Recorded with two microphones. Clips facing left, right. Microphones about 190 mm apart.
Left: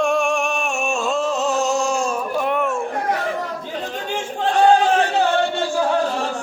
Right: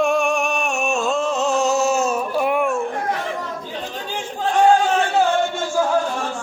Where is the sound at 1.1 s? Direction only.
Centre (ahead or behind).